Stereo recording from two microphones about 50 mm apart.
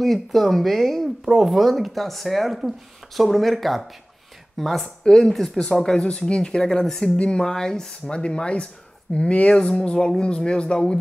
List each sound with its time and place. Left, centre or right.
0.0 s speech: centre